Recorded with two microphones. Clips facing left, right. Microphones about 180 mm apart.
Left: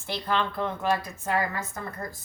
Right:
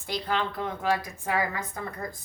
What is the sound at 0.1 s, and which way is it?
Speech, 15° right (ahead or behind).